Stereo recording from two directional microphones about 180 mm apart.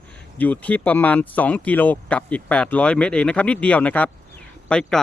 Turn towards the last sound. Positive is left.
turn(degrees=5)  # may be behind; listen again after turning